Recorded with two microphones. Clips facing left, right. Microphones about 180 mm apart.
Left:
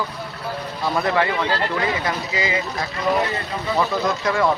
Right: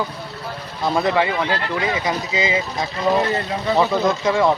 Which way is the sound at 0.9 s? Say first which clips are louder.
Right 2 dB; 20° right (ahead or behind).